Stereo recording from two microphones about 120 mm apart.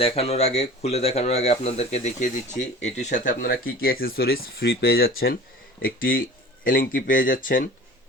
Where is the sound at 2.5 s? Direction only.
80° left.